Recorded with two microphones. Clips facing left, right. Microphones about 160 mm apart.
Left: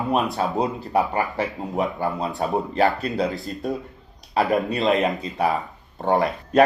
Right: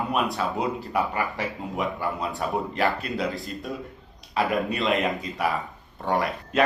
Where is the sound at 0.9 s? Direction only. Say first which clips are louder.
Left 7 dB; 35° left (ahead or behind).